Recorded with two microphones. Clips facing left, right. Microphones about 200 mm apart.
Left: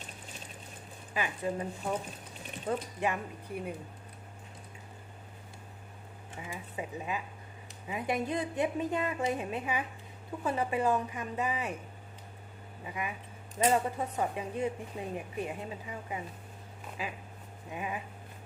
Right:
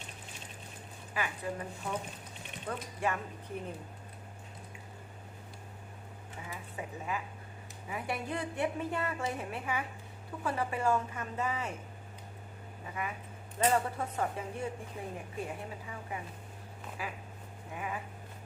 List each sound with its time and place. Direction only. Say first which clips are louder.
1.1 s a woman's voice: left 3 dB; 20° left (ahead or behind)
2.6 s a woman's voice: left 3 dB; 15° left (ahead or behind)
6.5 s a woman's voice: left 3 dB; 20° left (ahead or behind)
12.8 s a woman's voice: left 1 dB; 15° left (ahead or behind)